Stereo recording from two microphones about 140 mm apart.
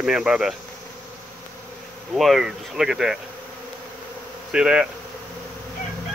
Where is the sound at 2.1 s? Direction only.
Centre (ahead or behind).